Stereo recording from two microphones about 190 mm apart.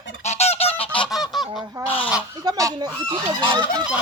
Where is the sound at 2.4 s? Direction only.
20° right (ahead or behind).